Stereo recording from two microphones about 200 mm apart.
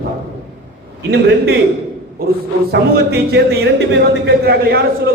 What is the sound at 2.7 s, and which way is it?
A man's voice, 55° right (ahead or behind).